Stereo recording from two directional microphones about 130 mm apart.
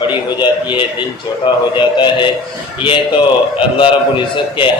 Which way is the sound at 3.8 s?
40° left (ahead or behind).